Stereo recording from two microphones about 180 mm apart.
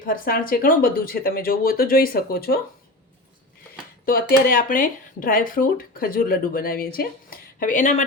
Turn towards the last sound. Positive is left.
turn(degrees=45)  # may be behind; listen again after turning